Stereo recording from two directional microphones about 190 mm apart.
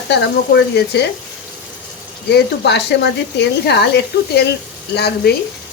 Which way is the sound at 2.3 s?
65° left (ahead or behind).